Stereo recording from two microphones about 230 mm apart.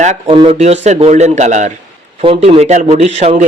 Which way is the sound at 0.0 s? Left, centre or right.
Right.